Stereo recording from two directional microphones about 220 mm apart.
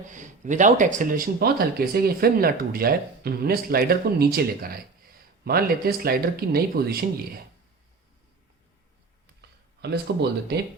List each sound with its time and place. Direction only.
0.1 s speech: 35° right (ahead or behind)
9.4 s speech: 50° right (ahead or behind)